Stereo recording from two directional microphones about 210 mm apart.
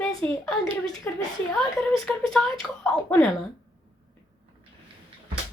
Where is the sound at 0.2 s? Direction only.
25° right (ahead or behind).